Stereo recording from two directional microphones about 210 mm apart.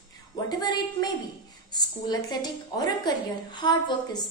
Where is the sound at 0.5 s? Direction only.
20° left (ahead or behind).